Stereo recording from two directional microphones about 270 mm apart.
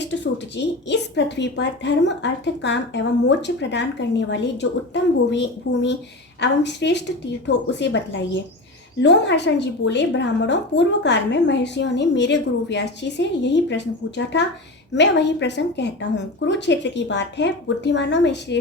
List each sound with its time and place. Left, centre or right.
0.0 s a woman's voice: left